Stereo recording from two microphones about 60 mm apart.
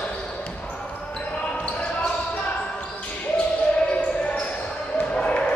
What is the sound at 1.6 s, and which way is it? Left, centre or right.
Basketball bounce, left.